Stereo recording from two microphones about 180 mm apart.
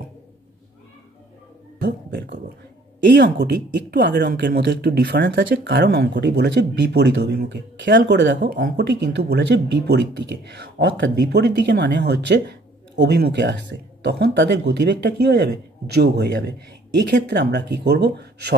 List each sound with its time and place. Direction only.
1.8 s speech: 70° right (ahead or behind)